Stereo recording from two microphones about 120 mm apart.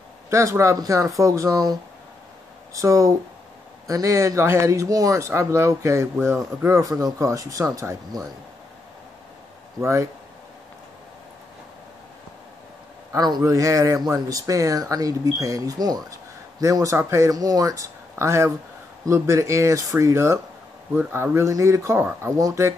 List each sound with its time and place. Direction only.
0.3 s speech: 25° right (ahead or behind)
9.8 s speech: 25° right (ahead or behind)
13.1 s speech: 30° right (ahead or behind)